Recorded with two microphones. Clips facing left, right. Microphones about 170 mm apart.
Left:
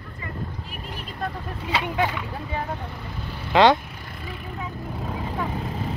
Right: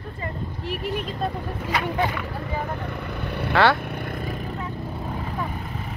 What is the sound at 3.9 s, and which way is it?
Vehicle, 55° right (ahead or behind).